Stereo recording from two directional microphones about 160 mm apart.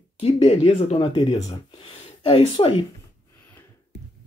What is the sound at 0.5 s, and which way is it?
Speech, 40° left (ahead or behind).